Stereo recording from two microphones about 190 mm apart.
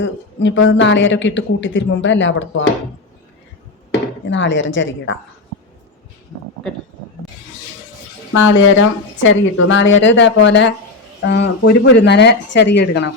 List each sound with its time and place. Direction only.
0.0 s speech: 80° left
4.3 s speech: 75° left (ahead or behind)
8.4 s a woman's voice: 90° left; by 13.1 s 65° left (ahead or behind)